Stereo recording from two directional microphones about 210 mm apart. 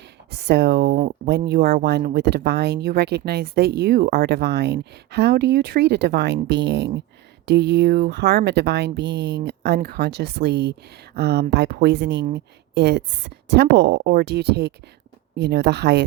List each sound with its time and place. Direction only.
0.3 s speech: 50° right (ahead or behind)